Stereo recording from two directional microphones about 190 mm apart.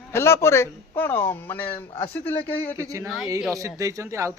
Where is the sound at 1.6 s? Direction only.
25° left (ahead or behind).